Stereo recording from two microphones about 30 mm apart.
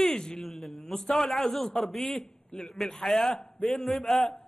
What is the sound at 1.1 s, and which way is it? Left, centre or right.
A man's voice, centre.